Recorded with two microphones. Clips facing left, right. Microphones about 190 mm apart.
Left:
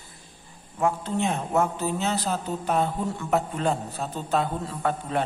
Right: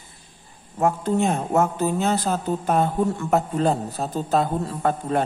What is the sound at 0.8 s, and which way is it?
A man's voice, 45° right (ahead or behind).